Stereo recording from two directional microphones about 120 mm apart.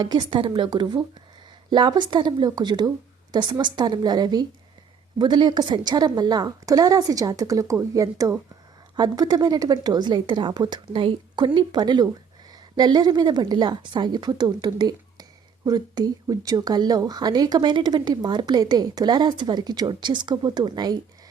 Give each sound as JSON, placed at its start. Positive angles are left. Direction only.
{"t": 0.0, "sound": "a woman's voice", "side_deg": -35}